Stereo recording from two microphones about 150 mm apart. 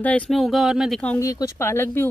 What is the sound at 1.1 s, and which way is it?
Speech, 20° left (ahead or behind).